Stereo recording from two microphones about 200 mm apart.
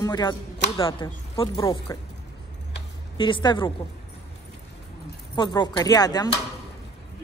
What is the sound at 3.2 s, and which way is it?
Speech, 25° left (ahead or behind).